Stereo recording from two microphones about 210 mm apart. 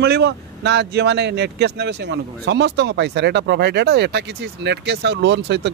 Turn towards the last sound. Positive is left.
turn(degrees=-55)  # may be behind; listen again after turning